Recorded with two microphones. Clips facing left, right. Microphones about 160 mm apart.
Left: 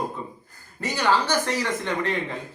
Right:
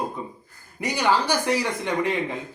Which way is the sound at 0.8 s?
15° right (ahead or behind).